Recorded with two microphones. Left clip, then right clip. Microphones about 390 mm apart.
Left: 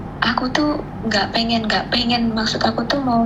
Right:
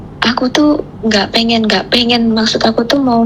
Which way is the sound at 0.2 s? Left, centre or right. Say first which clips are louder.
Right 6 dB; right.